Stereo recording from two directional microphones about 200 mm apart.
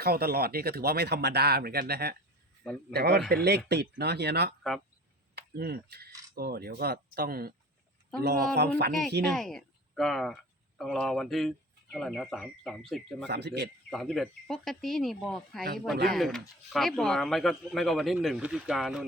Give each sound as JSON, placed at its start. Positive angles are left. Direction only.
{"t": 0.0, "sound": "a man's voice", "side_deg": -50}
{"t": 8.9, "sound": "speech", "side_deg": 0}
{"t": 13.2, "sound": "a man's voice", "side_deg": -55}
{"t": 13.9, "sound": "speech", "side_deg": 0}